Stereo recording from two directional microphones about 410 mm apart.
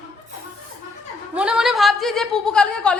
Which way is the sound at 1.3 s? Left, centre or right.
Centre.